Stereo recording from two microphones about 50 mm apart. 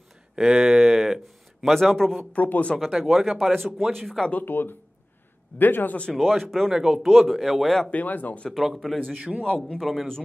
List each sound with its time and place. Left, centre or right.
0.4 s speech: centre
1.7 s a man's voice: centre
2.3 s speech: left
2.9 s speech: centre
4.5 s speech: left
6.1 s speech: centre
6.7 s speech: centre
7.9 s speech: left
8.5 s speech: centre
9.1 s a man's voice: right
9.4 s a man's voice: centre